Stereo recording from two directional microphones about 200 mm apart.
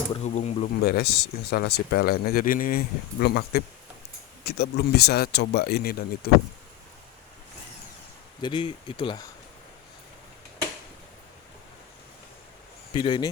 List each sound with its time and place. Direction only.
0.3 s speech: 40° left (ahead or behind)
8.4 s speech: 25° left (ahead or behind)
12.9 s speech: 25° left (ahead or behind)